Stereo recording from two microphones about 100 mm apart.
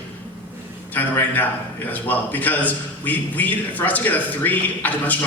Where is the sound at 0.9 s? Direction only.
20° left (ahead or behind).